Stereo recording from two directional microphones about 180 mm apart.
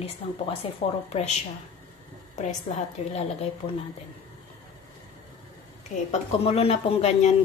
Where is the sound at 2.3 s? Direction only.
40° left (ahead or behind).